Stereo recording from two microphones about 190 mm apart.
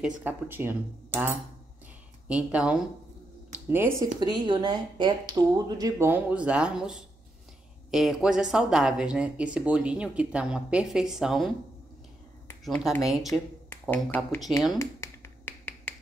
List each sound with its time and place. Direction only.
0.2 s speech: 10° right (ahead or behind)
4.2 s speech: 20° right (ahead or behind); by 11.5 s centre (ahead or behind)
12.6 s speech: centre (ahead or behind)
14.8 s finger snapping: 10° left (ahead or behind)